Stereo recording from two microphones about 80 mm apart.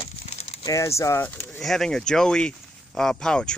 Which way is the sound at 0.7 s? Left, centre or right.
Left.